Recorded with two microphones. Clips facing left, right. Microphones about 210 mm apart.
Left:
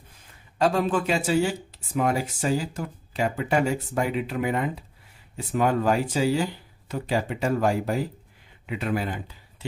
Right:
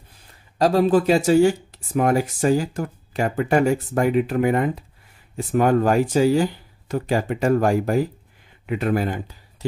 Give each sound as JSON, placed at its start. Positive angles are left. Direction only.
{"t": 0.6, "sound": "speech", "side_deg": -35}